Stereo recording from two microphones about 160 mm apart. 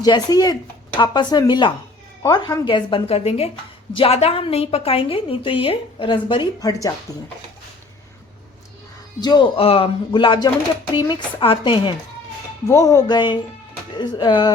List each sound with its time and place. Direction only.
0.0 s a woman's voice: 25° left (ahead or behind)
9.2 s a woman's voice: 30° left (ahead or behind)
12.6 s speech: 20° left (ahead or behind)